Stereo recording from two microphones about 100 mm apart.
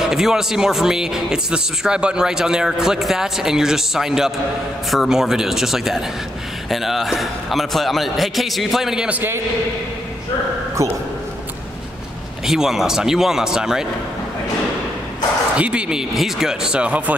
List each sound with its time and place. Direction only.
0.0 s speech: 5° right (ahead or behind)
10.8 s speech: 30° right (ahead or behind)
12.4 s speech: 5° right (ahead or behind)
15.5 s speech: 10° right (ahead or behind)